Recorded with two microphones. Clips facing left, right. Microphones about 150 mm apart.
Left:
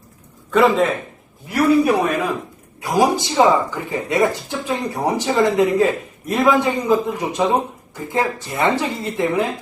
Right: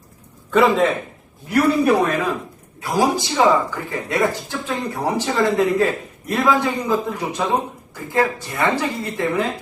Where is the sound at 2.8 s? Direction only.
15° left (ahead or behind).